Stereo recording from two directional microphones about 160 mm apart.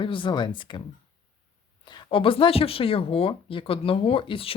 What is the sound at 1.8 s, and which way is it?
Speech, 30° left (ahead or behind).